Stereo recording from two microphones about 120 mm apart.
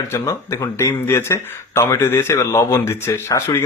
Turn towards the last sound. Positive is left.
turn(degrees=25)  # may be behind; listen again after turning